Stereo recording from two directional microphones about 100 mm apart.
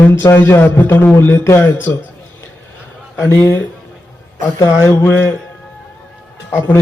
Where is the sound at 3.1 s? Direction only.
20° left (ahead or behind).